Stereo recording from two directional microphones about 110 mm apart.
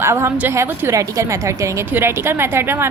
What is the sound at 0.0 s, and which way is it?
A woman's voice, 25° right (ahead or behind).